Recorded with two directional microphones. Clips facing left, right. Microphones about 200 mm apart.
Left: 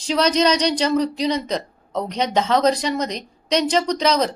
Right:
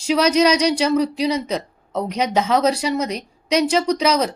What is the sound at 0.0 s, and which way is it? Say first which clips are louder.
Speech: right 2 dB; 10° right (ahead or behind).